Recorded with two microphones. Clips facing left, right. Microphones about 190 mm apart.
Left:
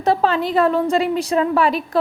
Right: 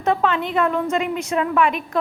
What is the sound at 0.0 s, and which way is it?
A woman's voice, 35° left (ahead or behind).